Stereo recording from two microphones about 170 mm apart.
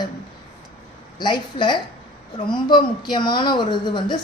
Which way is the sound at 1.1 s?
25° left (ahead or behind).